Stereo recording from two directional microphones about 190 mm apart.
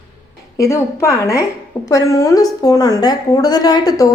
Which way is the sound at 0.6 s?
15° left (ahead or behind).